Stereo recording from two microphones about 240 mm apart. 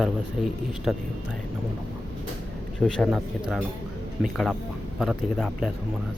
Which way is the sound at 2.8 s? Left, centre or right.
Centre.